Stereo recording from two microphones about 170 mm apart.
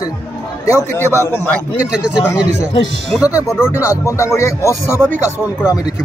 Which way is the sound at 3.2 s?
20° left (ahead or behind).